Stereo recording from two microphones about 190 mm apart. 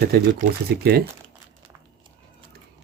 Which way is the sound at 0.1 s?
60° right (ahead or behind).